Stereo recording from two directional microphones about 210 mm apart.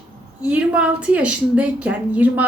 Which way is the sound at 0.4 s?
5° right (ahead or behind).